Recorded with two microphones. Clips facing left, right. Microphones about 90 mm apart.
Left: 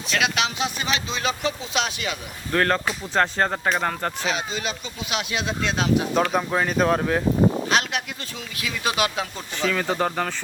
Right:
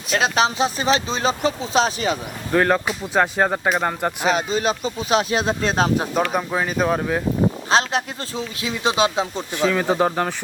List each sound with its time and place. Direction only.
0.1 s speech: 35° right (ahead or behind)
2.5 s speech: 10° right (ahead or behind)
4.3 s speech: 40° right (ahead or behind)
6.3 s speech: 5° right (ahead or behind)
7.7 s speech: 30° right (ahead or behind); by 10.3 s 10° right (ahead or behind)